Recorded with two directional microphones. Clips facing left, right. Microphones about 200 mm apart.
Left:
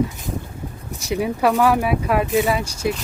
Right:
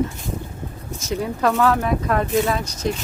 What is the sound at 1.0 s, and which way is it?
Speech, 15° left (ahead or behind).